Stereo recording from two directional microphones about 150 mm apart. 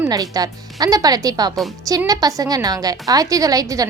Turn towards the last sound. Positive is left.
turn(degrees=-25)  # may be behind; listen again after turning